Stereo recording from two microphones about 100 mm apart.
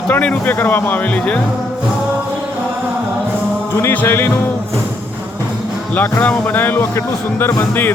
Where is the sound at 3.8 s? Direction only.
20° left (ahead or behind).